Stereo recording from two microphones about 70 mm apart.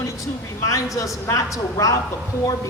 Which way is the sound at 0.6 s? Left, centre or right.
Left.